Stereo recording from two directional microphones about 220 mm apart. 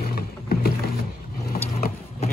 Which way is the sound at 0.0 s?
45° left (ahead or behind).